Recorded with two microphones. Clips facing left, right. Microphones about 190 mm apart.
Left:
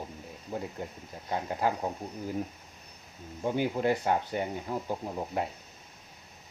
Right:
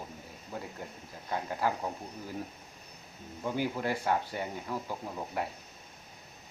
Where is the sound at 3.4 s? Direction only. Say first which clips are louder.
Left 4 dB; 25° left (ahead or behind).